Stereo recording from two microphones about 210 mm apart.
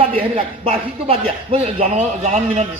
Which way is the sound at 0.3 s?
25° right (ahead or behind).